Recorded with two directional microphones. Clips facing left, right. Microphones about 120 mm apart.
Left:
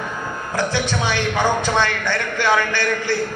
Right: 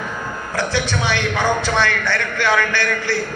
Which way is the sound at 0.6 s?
15° left (ahead or behind).